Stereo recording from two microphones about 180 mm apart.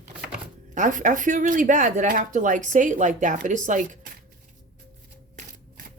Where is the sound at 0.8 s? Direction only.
45° right (ahead or behind).